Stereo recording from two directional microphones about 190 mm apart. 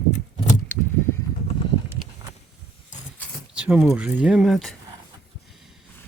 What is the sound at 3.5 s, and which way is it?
Speech, 5° right (ahead or behind).